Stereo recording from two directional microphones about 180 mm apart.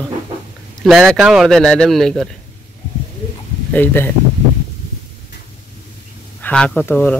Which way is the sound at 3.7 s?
10° left (ahead or behind).